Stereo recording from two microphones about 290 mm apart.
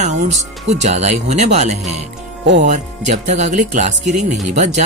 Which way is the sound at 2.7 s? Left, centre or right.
Right.